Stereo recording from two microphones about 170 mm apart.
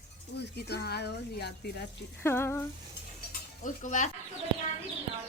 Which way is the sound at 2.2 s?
15° left (ahead or behind).